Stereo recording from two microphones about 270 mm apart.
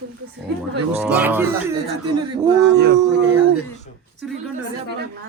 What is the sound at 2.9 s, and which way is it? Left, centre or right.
Speech, centre.